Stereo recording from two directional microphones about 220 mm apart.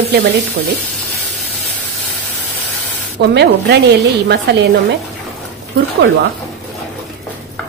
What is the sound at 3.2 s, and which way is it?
A woman's voice, 50° right (ahead or behind).